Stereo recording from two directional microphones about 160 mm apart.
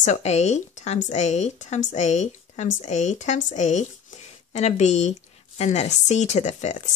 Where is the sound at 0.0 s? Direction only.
45° left (ahead or behind).